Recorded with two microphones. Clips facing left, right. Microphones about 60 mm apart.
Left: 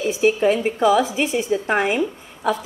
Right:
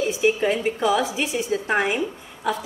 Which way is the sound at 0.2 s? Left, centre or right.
Left.